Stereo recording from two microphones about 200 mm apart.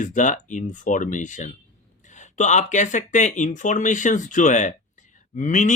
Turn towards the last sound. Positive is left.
turn(degrees=40)  # may be behind; listen again after turning